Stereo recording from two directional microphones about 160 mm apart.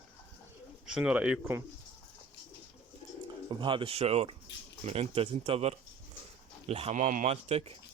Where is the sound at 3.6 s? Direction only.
35° right (ahead or behind).